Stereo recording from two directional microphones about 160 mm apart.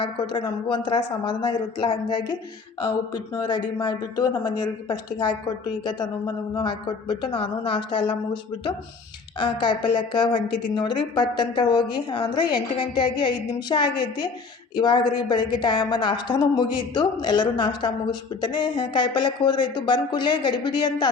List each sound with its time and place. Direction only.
0.0 s a woman's voice: 30° left (ahead or behind)
9.4 s a woman's voice: 30° left (ahead or behind)